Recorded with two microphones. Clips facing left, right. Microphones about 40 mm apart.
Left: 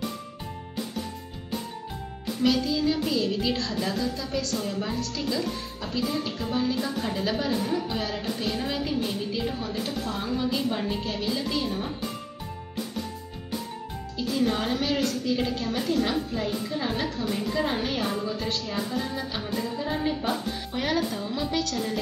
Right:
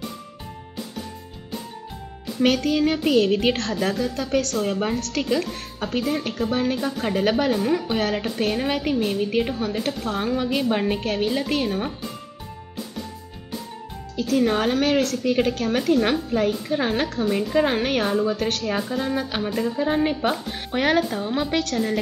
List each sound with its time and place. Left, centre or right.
2.4 s speech: right
14.1 s a woman's voice: right